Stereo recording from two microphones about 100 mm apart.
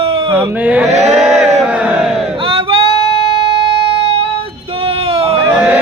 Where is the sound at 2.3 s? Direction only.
70° right (ahead or behind).